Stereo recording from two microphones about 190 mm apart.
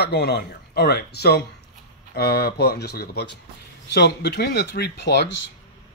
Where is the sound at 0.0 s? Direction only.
60° left (ahead or behind).